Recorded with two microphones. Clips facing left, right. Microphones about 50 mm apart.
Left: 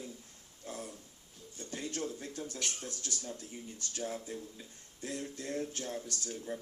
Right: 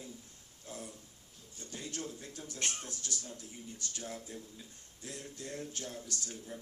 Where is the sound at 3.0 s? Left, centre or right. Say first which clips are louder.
Left 2 dB; left.